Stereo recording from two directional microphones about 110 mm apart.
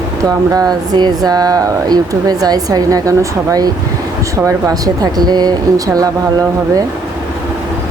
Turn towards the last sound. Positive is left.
turn(degrees=-35)  # may be behind; listen again after turning